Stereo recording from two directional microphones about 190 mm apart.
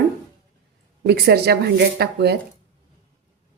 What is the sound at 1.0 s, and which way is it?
Speech, 60° right (ahead or behind).